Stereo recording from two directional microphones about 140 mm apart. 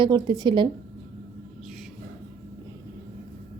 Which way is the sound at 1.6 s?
Centre (ahead or behind).